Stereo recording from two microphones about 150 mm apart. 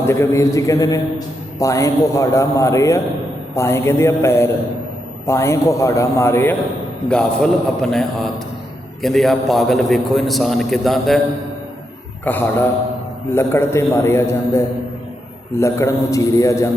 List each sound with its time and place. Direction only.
0.0 s a man's voice: 15° left (ahead or behind)
7.1 s a man's voice: 5° left (ahead or behind)
12.2 s a man's voice: 10° left (ahead or behind)